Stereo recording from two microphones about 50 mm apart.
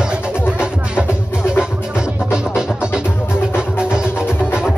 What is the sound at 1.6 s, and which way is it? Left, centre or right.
Music, centre.